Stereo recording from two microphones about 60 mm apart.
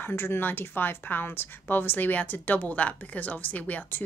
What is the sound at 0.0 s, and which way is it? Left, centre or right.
A woman's voice, left.